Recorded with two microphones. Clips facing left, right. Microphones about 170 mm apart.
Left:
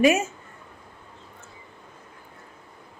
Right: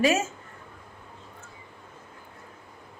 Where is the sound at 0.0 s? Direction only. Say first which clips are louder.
Left 4 dB; 15° left (ahead or behind).